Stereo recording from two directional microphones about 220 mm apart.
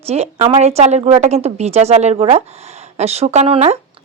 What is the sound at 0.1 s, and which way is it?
A woman's voice, 30° right (ahead or behind).